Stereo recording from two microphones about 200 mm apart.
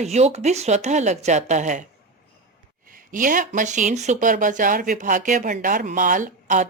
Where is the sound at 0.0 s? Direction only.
35° right (ahead or behind).